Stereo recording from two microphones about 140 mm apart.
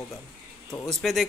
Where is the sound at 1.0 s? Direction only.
Centre (ahead or behind).